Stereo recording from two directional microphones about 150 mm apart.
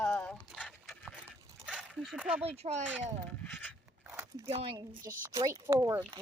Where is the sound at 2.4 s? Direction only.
45° right (ahead or behind).